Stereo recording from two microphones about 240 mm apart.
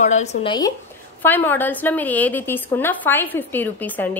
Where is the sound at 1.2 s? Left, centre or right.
Centre.